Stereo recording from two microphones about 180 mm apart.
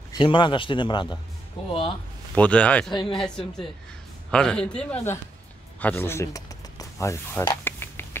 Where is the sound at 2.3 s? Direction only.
5° left (ahead or behind).